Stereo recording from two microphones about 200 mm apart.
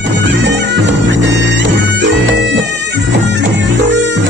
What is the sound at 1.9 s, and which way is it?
Music, 65° right (ahead or behind).